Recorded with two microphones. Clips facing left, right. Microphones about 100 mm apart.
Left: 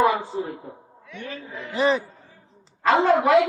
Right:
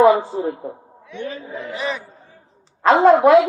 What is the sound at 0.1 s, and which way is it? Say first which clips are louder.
Speech: right 8 dB; 30° right (ahead or behind).